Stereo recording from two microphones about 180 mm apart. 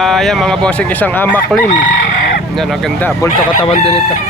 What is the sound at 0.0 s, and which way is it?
Speech, centre (ahead or behind).